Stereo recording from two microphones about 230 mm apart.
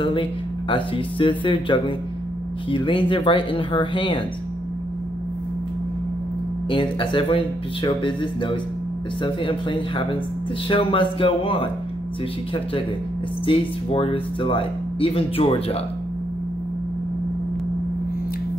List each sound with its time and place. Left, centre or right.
0.0 s speech: left
6.7 s speech: left
13.5 s speech: left